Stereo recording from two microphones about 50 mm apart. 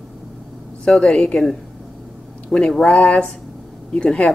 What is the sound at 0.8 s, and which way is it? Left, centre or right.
A woman's voice, centre.